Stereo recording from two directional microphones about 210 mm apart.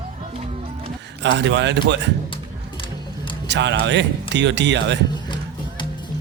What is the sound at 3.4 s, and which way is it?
Speech, 55° right (ahead or behind).